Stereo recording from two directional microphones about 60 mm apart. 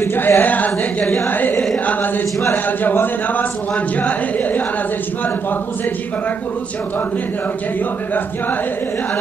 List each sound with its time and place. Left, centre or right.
0.0 s speech: left